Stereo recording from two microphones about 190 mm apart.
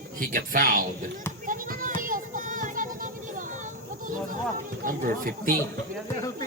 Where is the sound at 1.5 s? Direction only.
45° right (ahead or behind).